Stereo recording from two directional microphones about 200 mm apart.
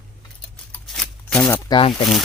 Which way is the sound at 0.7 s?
Centre (ahead or behind).